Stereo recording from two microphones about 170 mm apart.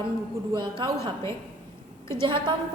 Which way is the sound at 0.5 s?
30° right (ahead or behind).